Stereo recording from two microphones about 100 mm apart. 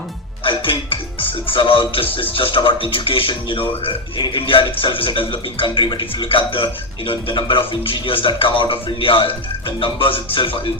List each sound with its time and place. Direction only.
0.4 s a man's voice: 60° left (ahead or behind)